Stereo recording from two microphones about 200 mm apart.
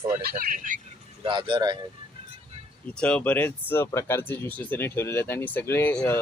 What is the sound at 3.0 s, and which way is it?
Speech, 5° left (ahead or behind).